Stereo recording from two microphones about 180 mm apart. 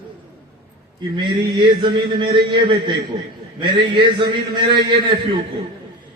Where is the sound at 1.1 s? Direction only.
25° right (ahead or behind).